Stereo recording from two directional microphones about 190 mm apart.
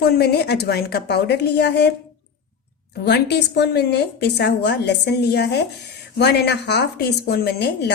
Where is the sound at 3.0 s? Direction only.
60° left (ahead or behind).